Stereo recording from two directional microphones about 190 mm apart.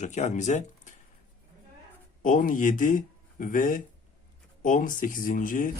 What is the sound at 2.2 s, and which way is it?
Speech, 45° left (ahead or behind).